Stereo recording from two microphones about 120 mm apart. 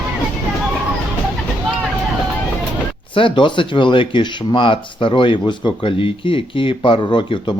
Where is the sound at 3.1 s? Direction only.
45° left (ahead or behind).